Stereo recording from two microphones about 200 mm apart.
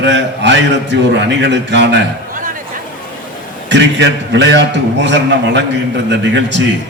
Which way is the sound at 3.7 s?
65° right (ahead or behind).